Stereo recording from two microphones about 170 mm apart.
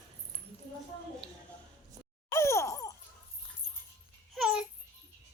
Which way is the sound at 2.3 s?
15° left (ahead or behind).